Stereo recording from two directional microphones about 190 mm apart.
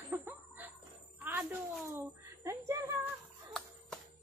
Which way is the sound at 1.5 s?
15° right (ahead or behind).